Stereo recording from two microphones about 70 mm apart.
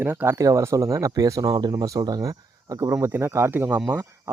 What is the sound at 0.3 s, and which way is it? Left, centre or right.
Speech, right.